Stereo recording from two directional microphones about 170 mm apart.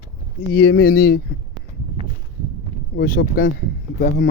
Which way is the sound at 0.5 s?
80° left.